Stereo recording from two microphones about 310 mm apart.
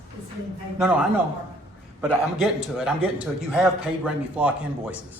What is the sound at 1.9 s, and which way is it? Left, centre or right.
A man's voice, centre.